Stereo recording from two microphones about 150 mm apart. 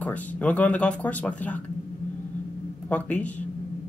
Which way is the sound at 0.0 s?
10° left (ahead or behind).